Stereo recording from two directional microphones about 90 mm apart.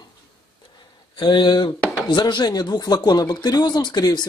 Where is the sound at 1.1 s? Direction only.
60° left (ahead or behind).